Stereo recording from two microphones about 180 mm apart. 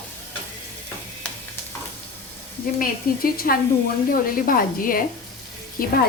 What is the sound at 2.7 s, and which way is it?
A woman's voice, 55° left (ahead or behind).